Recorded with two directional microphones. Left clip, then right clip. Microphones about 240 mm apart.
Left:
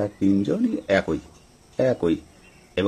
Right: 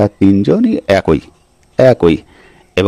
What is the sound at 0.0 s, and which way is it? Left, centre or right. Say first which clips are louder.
Speech: right 11 dB; right.